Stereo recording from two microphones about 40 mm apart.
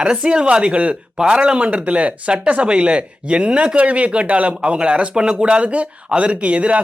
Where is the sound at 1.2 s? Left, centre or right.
Right.